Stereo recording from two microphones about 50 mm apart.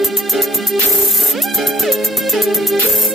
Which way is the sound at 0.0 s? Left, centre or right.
Centre.